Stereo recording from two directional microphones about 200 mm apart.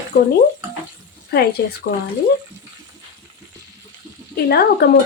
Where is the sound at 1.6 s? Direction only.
55° left (ahead or behind).